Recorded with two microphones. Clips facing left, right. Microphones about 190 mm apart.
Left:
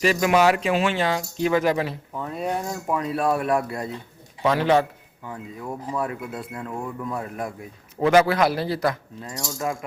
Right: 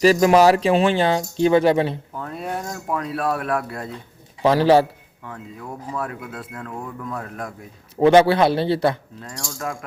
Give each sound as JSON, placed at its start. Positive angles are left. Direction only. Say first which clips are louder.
{"t": 0.0, "sound": "speech", "louder": "right 5 dB", "side_deg": -35}
{"t": 2.1, "sound": "speech", "louder": "left 1 dB", "side_deg": 0}
{"t": 4.4, "sound": "speech", "louder": "right 5 dB", "side_deg": -35}
{"t": 5.2, "sound": "speech", "louder": "left 1 dB", "side_deg": 5}
{"t": 7.9, "sound": "a man's voice", "louder": "right 4 dB", "side_deg": -30}
{"t": 9.2, "sound": "speech", "louder": "left 2 dB", "side_deg": 0}